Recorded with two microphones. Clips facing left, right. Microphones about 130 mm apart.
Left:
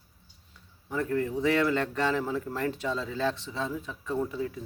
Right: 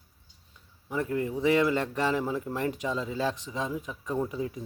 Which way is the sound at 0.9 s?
15° right (ahead or behind).